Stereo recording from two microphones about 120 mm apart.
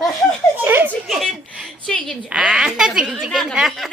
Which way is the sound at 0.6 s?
15° right (ahead or behind).